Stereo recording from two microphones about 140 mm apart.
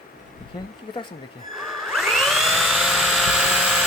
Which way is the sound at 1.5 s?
Centre (ahead or behind).